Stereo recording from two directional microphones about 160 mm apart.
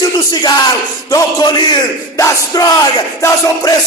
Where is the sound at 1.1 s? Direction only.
25° left (ahead or behind).